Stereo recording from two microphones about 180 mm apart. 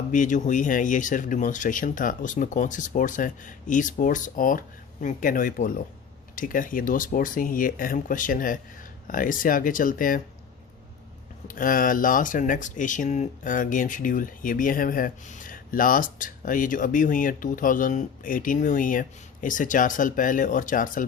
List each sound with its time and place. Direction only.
0.1 s speech: 45° left (ahead or behind)
11.4 s speech: 50° left (ahead or behind)